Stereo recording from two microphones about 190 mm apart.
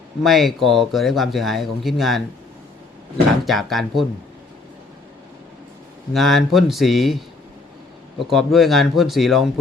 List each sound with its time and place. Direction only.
0.2 s speech: centre (ahead or behind)
3.4 s speech: centre (ahead or behind)
6.1 s speech: centre (ahead or behind)
8.3 s speech: centre (ahead or behind)